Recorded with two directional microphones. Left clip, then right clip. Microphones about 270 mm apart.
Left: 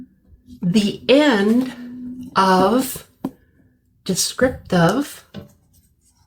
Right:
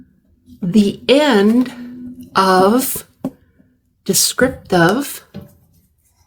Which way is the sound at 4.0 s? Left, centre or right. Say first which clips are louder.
Right 4 dB; right.